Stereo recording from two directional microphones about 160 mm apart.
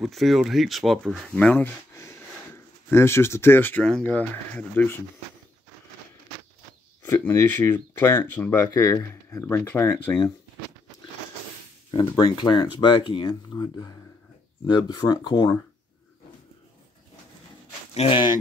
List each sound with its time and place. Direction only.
0.0 s speech: centre (ahead or behind)
7.1 s speech: 15° left (ahead or behind)
11.9 s speech: 30° left (ahead or behind)
17.9 s speech: 35° left (ahead or behind)